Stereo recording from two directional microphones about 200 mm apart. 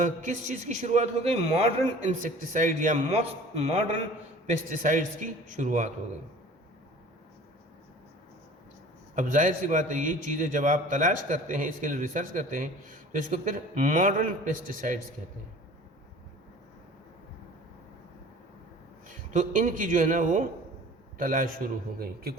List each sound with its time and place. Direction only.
0.0 s a man's voice: 40° right (ahead or behind)
9.1 s a man's voice: 40° right (ahead or behind)
19.3 s a man's voice: 40° right (ahead or behind)